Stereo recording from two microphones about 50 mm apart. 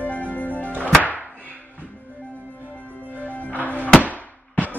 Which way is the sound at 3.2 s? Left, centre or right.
Left.